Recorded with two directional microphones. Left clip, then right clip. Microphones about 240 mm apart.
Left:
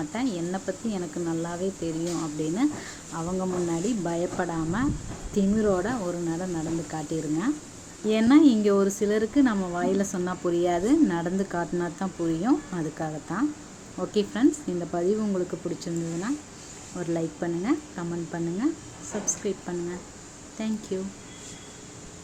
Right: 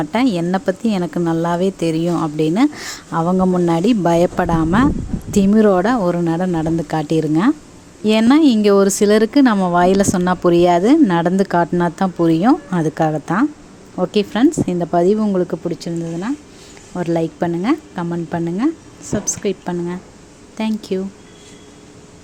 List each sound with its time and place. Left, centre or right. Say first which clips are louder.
0.0 s a woman's voice: right 12 dB; right